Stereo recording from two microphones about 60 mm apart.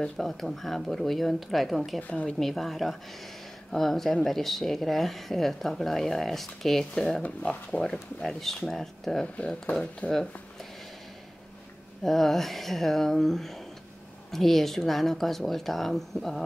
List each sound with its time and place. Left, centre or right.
0.0 s speech: centre
2.0 s speech: left
2.2 s speech: centre
7.2 s speech: centre
9.2 s speech: centre
12.0 s speech: centre